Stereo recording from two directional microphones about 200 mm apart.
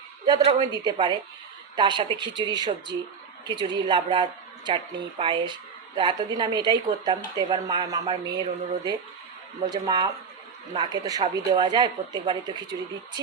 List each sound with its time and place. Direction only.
0.3 s a woman's voice: 20° right (ahead or behind)